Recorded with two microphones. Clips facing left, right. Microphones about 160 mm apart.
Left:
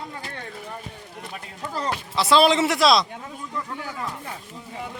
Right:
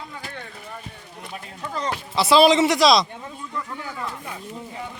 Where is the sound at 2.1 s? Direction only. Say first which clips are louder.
Right 3 dB; 5° right (ahead or behind).